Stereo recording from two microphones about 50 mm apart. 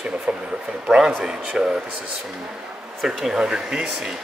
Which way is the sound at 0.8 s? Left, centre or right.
Centre.